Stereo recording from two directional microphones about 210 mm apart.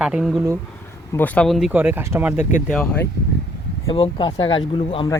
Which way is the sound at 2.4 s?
40° left (ahead or behind).